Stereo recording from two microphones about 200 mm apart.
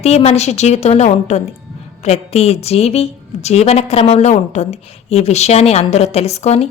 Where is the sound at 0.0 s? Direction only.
30° left (ahead or behind).